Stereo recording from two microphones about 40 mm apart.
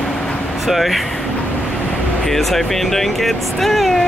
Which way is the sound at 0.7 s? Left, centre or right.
Centre.